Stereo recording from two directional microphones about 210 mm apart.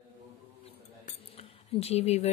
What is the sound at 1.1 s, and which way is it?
Cutlery, 30° left (ahead or behind).